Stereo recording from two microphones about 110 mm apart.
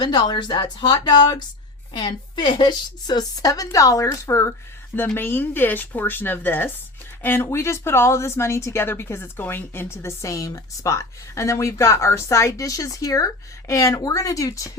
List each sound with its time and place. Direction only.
0.0 s a woman's voice: 40° left (ahead or behind)